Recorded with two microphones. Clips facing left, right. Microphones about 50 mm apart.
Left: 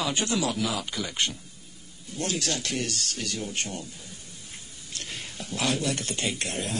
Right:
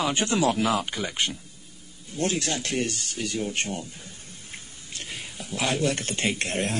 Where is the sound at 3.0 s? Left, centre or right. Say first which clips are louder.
Right 3 dB; centre.